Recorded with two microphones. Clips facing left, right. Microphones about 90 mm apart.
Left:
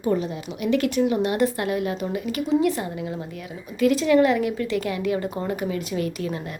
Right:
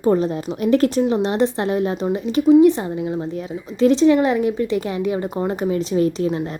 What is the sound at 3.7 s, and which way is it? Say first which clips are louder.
Speech: right 4 dB; 25° right (ahead or behind).